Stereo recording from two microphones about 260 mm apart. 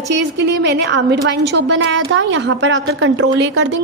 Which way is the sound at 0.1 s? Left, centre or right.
Right.